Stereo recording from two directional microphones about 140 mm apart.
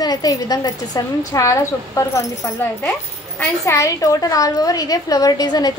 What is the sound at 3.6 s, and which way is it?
A woman's voice, 20° left (ahead or behind).